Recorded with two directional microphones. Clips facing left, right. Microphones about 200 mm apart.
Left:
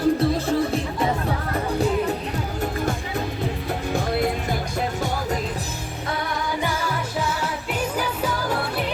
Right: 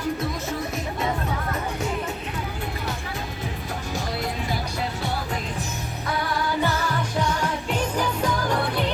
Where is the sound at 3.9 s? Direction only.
55° left (ahead or behind).